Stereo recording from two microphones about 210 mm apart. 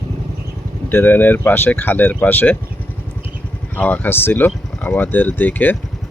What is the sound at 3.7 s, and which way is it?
Speech, 5° left (ahead or behind).